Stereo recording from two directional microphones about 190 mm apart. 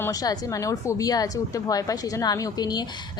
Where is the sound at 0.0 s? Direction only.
20° left (ahead or behind).